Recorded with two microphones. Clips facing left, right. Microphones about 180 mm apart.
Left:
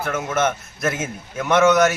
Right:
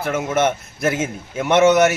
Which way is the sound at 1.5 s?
25° right (ahead or behind).